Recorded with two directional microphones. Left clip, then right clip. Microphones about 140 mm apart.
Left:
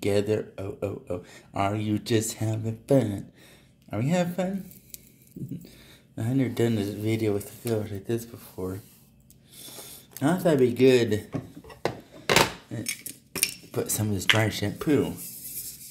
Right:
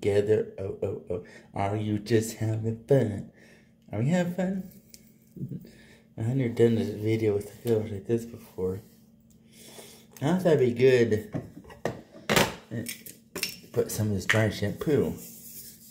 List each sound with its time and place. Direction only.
0.0 s speech: 30° left (ahead or behind)
6.1 s speech: 35° left (ahead or behind)
12.8 s cutlery: 65° left (ahead or behind)
13.7 s speech: 35° left (ahead or behind)